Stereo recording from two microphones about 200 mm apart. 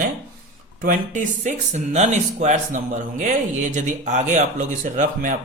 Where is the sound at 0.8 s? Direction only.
40° right (ahead or behind).